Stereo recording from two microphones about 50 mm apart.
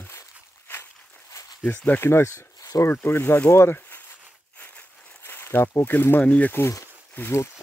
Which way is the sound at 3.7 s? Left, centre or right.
Left.